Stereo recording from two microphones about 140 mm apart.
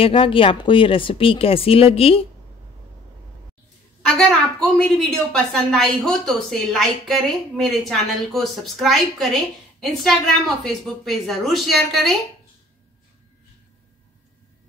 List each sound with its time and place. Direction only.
0.0 s speech: 40° left (ahead or behind)
4.0 s a woman's voice: 5° left (ahead or behind)